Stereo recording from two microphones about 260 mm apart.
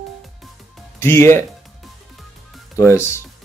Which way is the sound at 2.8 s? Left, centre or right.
Centre.